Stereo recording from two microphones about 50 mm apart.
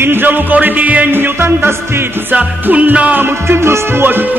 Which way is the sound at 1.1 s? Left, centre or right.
Right.